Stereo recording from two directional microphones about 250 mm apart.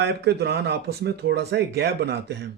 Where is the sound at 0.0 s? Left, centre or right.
Right.